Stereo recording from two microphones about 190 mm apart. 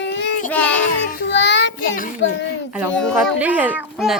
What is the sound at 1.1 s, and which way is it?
Child singing, 70° left (ahead or behind).